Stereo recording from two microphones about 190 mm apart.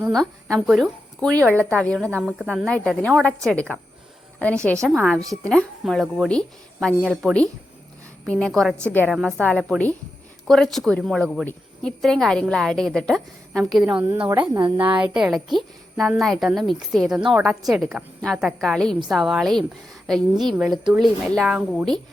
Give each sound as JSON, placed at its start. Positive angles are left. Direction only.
{"t": 0.0, "sound": "a woman's voice", "side_deg": 0}
{"t": 0.4, "sound": "speech", "side_deg": -15}
{"t": 1.7, "sound": "a woman's voice", "side_deg": 5}
{"t": 14.5, "sound": "speech", "side_deg": -25}
{"t": 14.8, "sound": "a woman's voice", "side_deg": -5}